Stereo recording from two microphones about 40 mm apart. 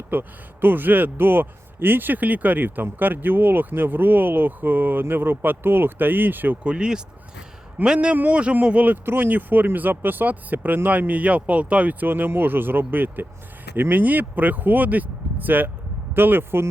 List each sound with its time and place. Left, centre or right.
0.1 s speech: right
6.7 s speech: right
7.9 s speech: right
9.0 s speech: right
9.3 s speech: right